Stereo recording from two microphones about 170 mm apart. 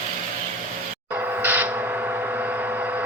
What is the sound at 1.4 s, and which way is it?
Vehicle, 10° right (ahead or behind).